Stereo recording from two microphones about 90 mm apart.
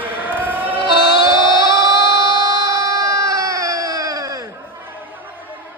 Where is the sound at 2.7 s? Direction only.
40° right (ahead or behind).